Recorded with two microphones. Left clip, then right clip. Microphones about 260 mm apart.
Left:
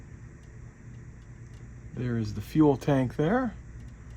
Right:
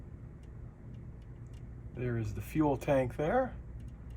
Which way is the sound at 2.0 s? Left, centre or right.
Left.